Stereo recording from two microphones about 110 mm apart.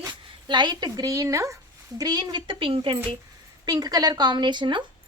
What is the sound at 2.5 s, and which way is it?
Speech, 55° right (ahead or behind).